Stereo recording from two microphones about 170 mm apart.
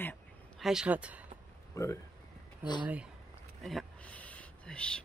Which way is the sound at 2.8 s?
10° right (ahead or behind).